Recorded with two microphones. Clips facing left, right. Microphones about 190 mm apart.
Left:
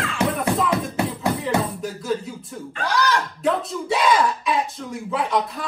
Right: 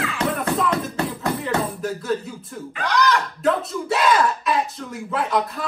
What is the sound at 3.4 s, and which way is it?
Speech, centre (ahead or behind).